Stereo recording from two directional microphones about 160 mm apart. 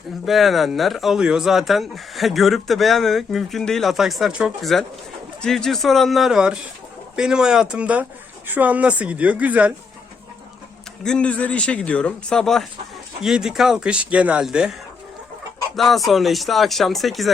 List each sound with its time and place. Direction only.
0.3 s speech: centre (ahead or behind)
11.0 s speech: 5° left (ahead or behind)